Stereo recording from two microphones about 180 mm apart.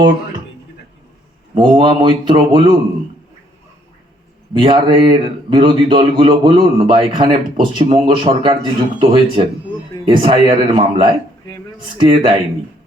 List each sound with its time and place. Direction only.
1.5 s speech: 25° right (ahead or behind)
4.5 s speech: 25° right (ahead or behind)